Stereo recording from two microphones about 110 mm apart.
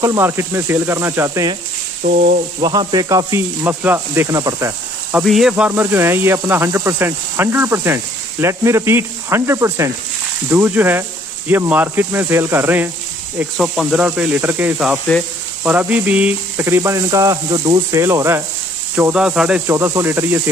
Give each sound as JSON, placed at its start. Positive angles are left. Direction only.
{"t": 0.0, "sound": "speech", "side_deg": -25}
{"t": 2.6, "sound": "speech", "side_deg": -40}
{"t": 3.6, "sound": "speech", "side_deg": -20}
{"t": 5.2, "sound": "speech", "side_deg": 0}
{"t": 5.7, "sound": "speech", "side_deg": -20}
{"t": 13.6, "sound": "speech", "side_deg": -5}
{"t": 14.0, "sound": "speech", "side_deg": -15}
{"t": 15.1, "sound": "speech", "side_deg": 10}
{"t": 15.6, "sound": "speech", "side_deg": -15}
{"t": 16.6, "sound": "speech", "side_deg": -25}
{"t": 17.9, "sound": "speech", "side_deg": -25}
{"t": 19.1, "sound": "speech", "side_deg": -10}
{"t": 19.6, "sound": "speech", "side_deg": -25}